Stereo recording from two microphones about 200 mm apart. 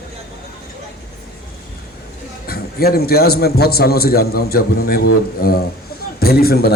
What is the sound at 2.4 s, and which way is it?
Speech, 50° left (ahead or behind).